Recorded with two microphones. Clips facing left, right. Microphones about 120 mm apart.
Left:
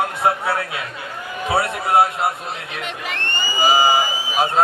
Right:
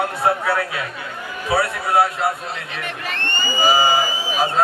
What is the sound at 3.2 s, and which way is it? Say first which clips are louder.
Crowd: right 1 dB; 30° right (ahead or behind).